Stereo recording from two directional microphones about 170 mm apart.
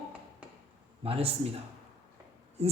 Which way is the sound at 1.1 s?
35° right (ahead or behind).